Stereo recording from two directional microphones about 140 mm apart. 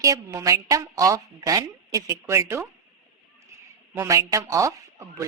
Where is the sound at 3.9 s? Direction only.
20° right (ahead or behind).